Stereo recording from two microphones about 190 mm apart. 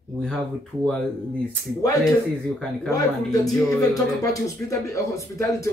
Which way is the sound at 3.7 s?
20° left (ahead or behind).